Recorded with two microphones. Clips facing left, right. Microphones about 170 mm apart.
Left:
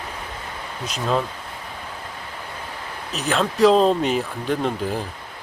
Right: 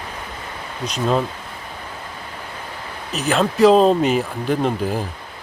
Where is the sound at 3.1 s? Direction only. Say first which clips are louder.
Right 3 dB; centre (ahead or behind).